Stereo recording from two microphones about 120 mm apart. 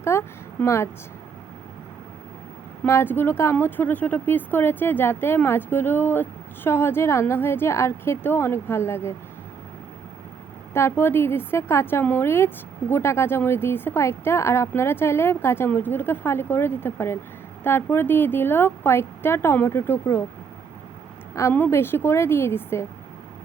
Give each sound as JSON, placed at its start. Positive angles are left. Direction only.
{"t": 0.0, "sound": "speech", "side_deg": 25}
{"t": 2.8, "sound": "a woman's voice", "side_deg": 20}
{"t": 10.8, "sound": "a woman's voice", "side_deg": 20}
{"t": 21.3, "sound": "a woman's voice", "side_deg": 20}